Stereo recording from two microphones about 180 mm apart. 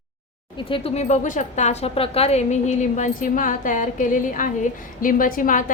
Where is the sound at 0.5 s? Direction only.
30° left (ahead or behind).